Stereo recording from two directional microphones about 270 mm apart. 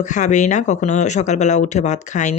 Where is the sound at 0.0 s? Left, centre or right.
Left.